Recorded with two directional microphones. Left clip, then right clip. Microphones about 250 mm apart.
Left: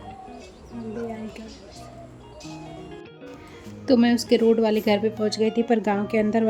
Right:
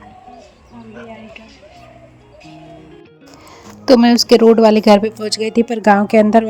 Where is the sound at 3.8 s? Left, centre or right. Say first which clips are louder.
Right 10 dB; right.